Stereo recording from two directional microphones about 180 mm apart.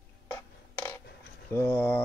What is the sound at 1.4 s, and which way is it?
Speech, 10° left (ahead or behind).